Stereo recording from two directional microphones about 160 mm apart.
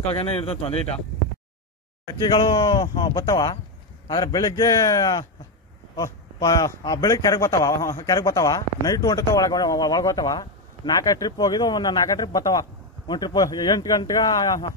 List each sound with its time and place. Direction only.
0.1 s speech: 35° left (ahead or behind)
2.0 s speech: 25° left (ahead or behind)